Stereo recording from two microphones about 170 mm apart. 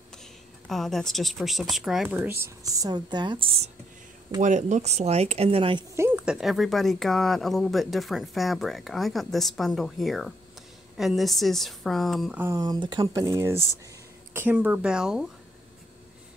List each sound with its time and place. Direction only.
0.7 s speech: centre (ahead or behind)
2.0 s a woman's voice: 10° right (ahead or behind); by 3.7 s 35° right (ahead or behind)
4.4 s speech: 45° right (ahead or behind)
5.9 s speech: 10° right (ahead or behind)
12.4 s a woman's voice: 20° right (ahead or behind)